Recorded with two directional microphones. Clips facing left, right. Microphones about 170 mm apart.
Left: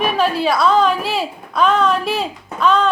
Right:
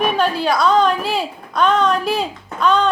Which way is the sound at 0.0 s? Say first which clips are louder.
Left 1 dB; centre (ahead or behind).